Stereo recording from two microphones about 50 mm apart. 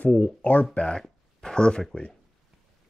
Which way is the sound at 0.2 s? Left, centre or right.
Left.